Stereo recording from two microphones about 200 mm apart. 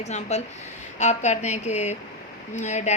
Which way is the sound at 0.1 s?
35° left (ahead or behind).